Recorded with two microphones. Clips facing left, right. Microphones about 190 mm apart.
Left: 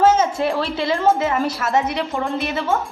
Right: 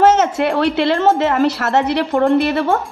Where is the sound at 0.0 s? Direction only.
70° right (ahead or behind).